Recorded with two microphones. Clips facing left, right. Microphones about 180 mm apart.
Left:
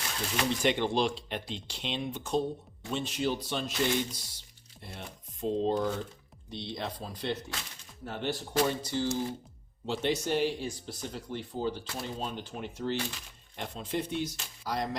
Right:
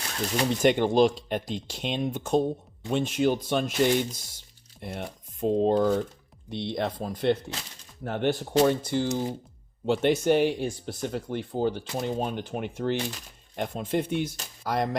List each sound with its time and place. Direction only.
0.3 s speech: 45° right (ahead or behind)
6.5 s speech: 60° right (ahead or behind)